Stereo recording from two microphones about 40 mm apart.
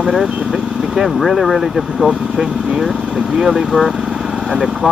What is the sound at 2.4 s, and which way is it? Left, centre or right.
Speech, right.